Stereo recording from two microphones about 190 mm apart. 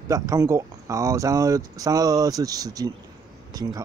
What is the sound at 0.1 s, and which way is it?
Speech, 15° right (ahead or behind).